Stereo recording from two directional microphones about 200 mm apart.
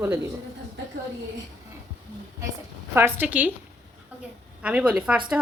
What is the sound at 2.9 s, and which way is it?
Speech, 10° right (ahead or behind).